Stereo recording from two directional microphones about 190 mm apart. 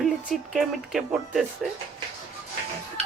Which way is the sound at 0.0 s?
Centre (ahead or behind).